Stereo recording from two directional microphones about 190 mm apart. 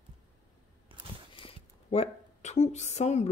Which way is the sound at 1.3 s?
30° left (ahead or behind).